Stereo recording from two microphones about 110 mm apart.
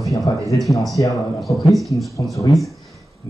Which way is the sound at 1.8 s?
Centre (ahead or behind).